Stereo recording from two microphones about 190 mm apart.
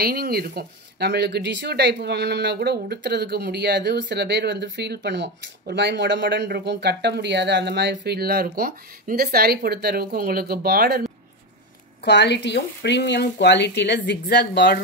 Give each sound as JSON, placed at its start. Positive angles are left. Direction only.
{"t": 0.0, "sound": "speech", "side_deg": -55}
{"t": 12.0, "sound": "speech", "side_deg": 65}